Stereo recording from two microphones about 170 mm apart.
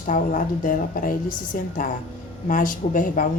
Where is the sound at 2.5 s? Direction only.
50° left (ahead or behind).